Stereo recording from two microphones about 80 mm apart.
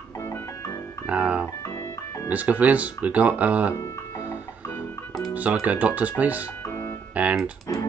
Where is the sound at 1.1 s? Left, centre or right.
Centre.